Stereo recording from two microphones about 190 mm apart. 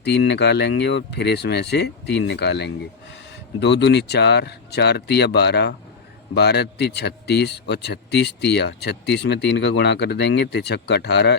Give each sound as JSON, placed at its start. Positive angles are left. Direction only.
{"t": 0.0, "sound": "a man's voice", "side_deg": 60}